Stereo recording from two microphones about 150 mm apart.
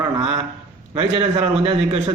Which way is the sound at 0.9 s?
40° right (ahead or behind).